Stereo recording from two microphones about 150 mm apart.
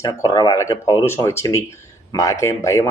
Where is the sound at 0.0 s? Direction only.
20° left (ahead or behind).